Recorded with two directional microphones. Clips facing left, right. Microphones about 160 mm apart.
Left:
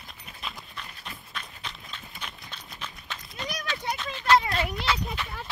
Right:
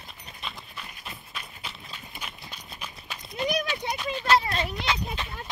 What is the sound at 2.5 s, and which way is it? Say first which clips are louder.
Horse: even; 10° right (ahead or behind).